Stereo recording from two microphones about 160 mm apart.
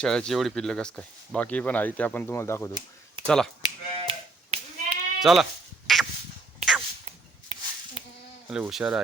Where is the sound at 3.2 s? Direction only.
5° left (ahead or behind).